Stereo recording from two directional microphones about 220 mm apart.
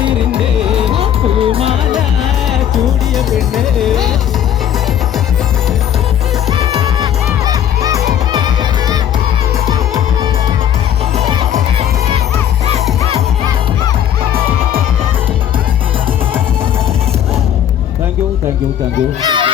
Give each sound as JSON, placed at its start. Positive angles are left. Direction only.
{"t": 0.9, "sound": "music", "side_deg": -25}
{"t": 3.2, "sound": "music", "side_deg": 0}
{"t": 6.5, "sound": "music", "side_deg": -15}
{"t": 7.4, "sound": "crowd", "side_deg": -15}
{"t": 11.2, "sound": "music", "side_deg": -20}
{"t": 19.3, "sound": "music", "side_deg": -20}